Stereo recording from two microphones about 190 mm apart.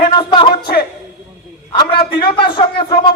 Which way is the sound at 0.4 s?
55° left (ahead or behind).